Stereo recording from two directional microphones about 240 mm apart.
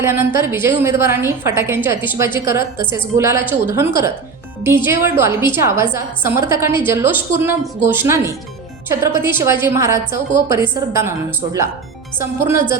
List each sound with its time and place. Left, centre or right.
0.0 s a woman's voice: centre
12.2 s a woman's voice: centre